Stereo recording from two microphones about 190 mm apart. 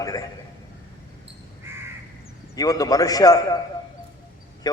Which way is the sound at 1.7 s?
10° right (ahead or behind).